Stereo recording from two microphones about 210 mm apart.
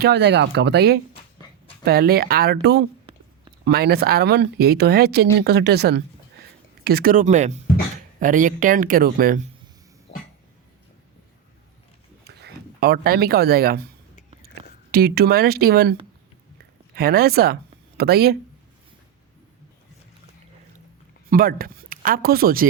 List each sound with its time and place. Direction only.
0.0 s speech: 55° right (ahead or behind)
10.1 s cough: 30° left (ahead or behind)
12.2 s speech: 50° right (ahead or behind)
14.9 s speech: 50° right (ahead or behind)
21.2 s speech: 45° right (ahead or behind)